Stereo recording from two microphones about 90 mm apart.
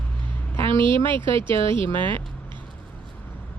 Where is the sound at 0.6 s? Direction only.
70° right (ahead or behind).